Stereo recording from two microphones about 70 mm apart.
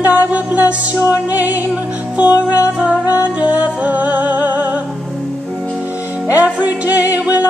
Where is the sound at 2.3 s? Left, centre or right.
Left.